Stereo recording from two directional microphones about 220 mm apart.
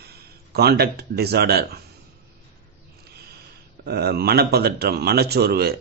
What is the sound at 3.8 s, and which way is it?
Speech, 45° right (ahead or behind).